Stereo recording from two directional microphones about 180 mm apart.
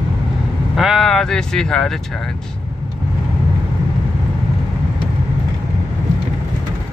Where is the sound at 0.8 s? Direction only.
Centre (ahead or behind).